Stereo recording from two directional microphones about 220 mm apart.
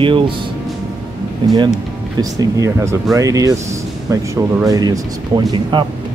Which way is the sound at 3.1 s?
15° right (ahead or behind).